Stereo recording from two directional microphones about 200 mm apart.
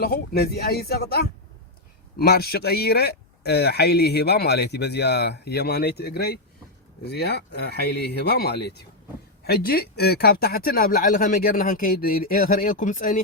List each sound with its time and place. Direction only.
0.0 s speech: 50° left (ahead or behind)